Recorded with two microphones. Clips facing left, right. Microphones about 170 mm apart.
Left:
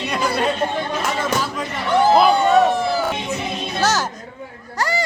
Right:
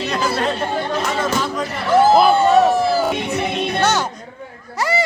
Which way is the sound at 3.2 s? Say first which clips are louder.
Right 4 dB; 65° right (ahead or behind).